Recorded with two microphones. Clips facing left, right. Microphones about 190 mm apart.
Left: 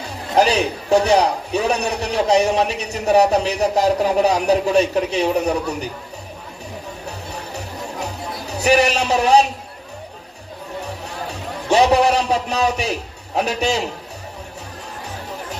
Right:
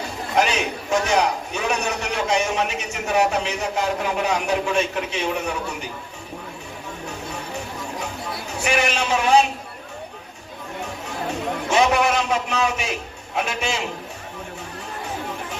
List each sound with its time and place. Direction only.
0.3 s a man's voice: 35° left (ahead or behind)
8.0 s music: 35° left (ahead or behind)
11.7 s a man's voice: 35° left (ahead or behind)